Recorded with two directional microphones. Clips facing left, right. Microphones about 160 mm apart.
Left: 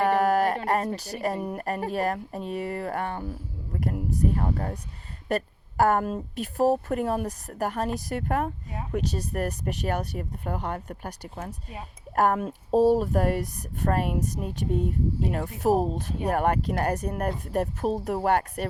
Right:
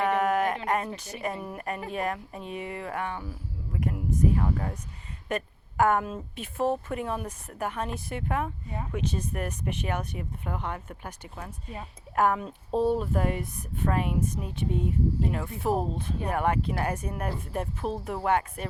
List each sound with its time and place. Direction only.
0.0 s speech: 35° left (ahead or behind)
14.7 s speech: centre (ahead or behind)
15.3 s speech: 40° left (ahead or behind)
17.1 s speech: 50° left (ahead or behind)